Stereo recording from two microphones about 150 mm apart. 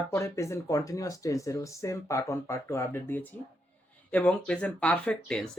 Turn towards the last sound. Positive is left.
turn(degrees=5)  # may be behind; listen again after turning